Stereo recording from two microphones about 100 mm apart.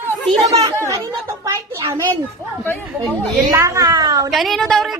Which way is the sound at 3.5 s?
30° right (ahead or behind).